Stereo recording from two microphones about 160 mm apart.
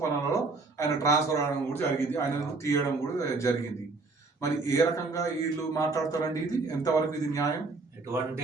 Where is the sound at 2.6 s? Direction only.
20° left (ahead or behind).